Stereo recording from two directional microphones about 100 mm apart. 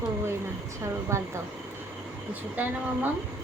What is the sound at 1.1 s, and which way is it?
Speech, 30° right (ahead or behind).